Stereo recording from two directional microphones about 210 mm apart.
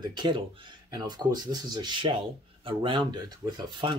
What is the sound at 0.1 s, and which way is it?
Speech, 20° right (ahead or behind).